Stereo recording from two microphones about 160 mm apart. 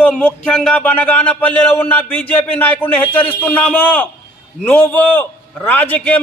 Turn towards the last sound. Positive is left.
turn(degrees=10)  # may be behind; listen again after turning